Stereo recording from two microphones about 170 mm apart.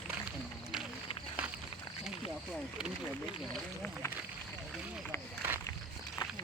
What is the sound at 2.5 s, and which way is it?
Speech, 5° right (ahead or behind).